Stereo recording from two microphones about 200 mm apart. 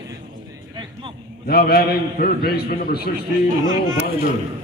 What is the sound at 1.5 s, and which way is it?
A man's voice, 50° left (ahead or behind).